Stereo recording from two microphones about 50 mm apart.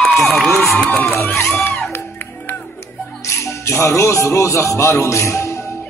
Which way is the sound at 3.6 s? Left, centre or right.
Left.